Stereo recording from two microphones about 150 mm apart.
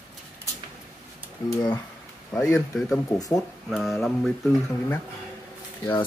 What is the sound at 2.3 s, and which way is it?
Speech, 20° left (ahead or behind).